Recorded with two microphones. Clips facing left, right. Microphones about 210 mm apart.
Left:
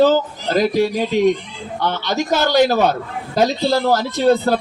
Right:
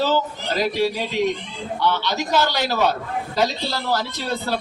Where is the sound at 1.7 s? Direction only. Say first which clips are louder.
Left 2 dB; 50° left (ahead or behind).